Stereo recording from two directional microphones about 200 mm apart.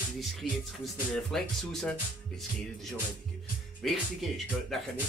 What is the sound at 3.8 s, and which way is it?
Speech, centre (ahead or behind).